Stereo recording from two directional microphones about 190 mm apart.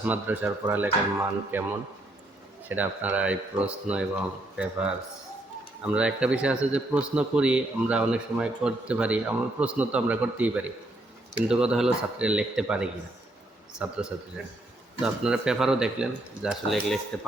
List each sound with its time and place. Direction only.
0.0 s a man's voice: 10° right (ahead or behind)
2.6 s a man's voice: 10° right (ahead or behind)